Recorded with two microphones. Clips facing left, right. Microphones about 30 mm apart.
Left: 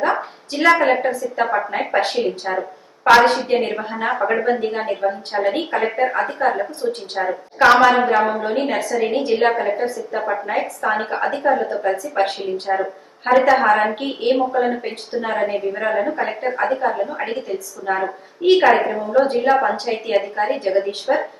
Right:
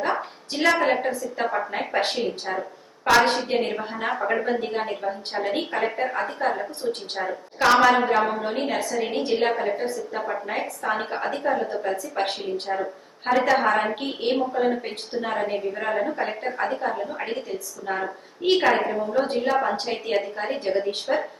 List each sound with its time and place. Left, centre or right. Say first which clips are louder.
0.0 s a sound: left 6 dB; centre
1.0 s a woman's voice: left 6 dB; centre
2.6 s a sound: left 6 dB; left
3.2 s a woman's voice: left 5 dB; centre
4.2 s a woman's voice: left 5 dB; left
4.4 s a woman's voice: left 5 dB; centre; by 7.8 s left
7.8 s a woman's voice: left 4 dB; centre
12.6 s a woman's voice: left 6 dB; left
13.5 s a woman's voice: left 6 dB; centre